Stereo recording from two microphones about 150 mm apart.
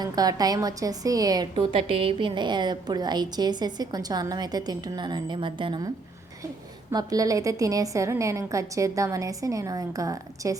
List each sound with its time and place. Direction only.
0.0 s a woman's voice: 25° right (ahead or behind)
6.9 s a woman's voice: 25° right (ahead or behind)